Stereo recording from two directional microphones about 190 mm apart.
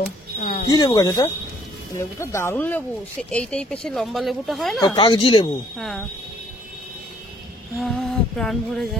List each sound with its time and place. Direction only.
0.0 s a sound: 50° left (ahead or behind)
0.7 s speech: 20° left (ahead or behind); by 4.9 s centre (ahead or behind)
4.9 s speech: 25° left (ahead or behind)
5.8 s speech: centre (ahead or behind)
7.7 s music: centre (ahead or behind)